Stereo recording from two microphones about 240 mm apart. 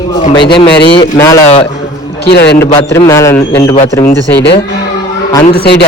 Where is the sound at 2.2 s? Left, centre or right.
Left.